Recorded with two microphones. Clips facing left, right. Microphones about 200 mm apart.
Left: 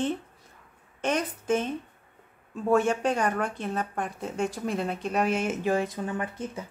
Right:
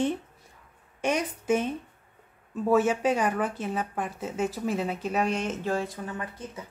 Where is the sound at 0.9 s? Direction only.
10° right (ahead or behind); by 6.0 s 15° left (ahead or behind).